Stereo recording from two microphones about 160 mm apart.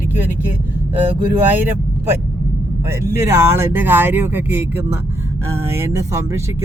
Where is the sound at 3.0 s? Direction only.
15° right (ahead or behind).